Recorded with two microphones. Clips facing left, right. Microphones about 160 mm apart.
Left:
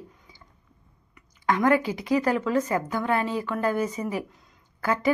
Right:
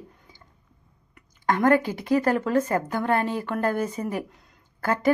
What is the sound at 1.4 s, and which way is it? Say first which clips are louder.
A woman's voice: right 1 dB; 50° right (ahead or behind).